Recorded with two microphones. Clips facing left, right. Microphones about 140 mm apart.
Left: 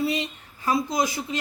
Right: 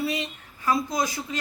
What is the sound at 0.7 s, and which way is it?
Speech, 20° left (ahead or behind).